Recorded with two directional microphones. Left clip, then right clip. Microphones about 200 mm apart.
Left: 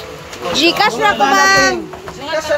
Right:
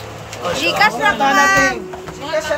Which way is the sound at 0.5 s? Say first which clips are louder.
Left 2 dB; 30° left (ahead or behind).